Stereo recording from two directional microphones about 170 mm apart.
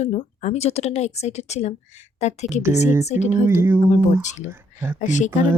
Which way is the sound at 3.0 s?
45° left (ahead or behind).